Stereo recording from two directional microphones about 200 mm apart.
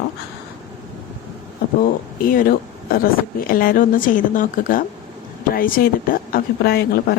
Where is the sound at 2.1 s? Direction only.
45° left (ahead or behind).